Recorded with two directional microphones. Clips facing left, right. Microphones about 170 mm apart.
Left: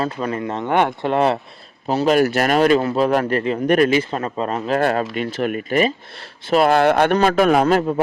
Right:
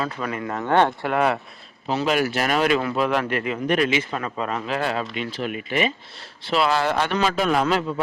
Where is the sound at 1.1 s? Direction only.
30° left (ahead or behind).